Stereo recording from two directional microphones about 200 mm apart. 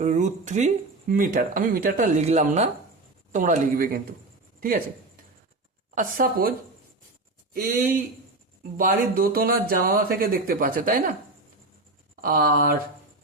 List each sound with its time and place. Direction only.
0.0 s speech: 35° right (ahead or behind)
5.9 s speech: 45° right (ahead or behind)
7.5 s speech: 40° right (ahead or behind)
12.2 s speech: 45° right (ahead or behind)